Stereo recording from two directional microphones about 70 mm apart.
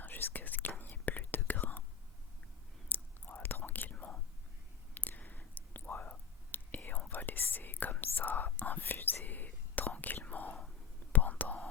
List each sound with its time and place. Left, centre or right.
0.0 s whispering: left
2.9 s whispering: left
3.9 s whispering: centre
4.9 s whispering: left